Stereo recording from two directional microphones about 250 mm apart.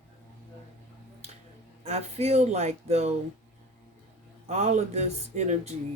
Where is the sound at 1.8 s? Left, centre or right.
Right.